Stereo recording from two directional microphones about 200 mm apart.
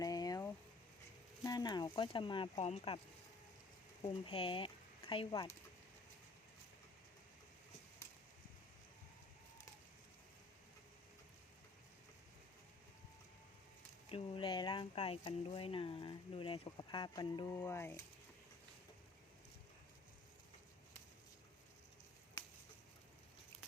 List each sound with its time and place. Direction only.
0.0 s boiling: 20° left (ahead or behind)
1.5 s speech: 20° left (ahead or behind)
4.0 s speech: 30° left (ahead or behind)
14.1 s speech: 25° left (ahead or behind)